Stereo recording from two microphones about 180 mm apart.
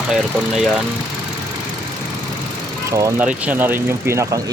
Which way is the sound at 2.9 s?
15° right (ahead or behind).